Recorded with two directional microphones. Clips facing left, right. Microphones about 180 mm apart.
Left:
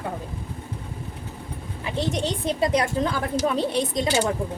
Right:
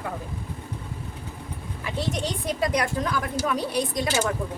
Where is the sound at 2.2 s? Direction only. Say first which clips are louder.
Left 3 dB; 25° left (ahead or behind).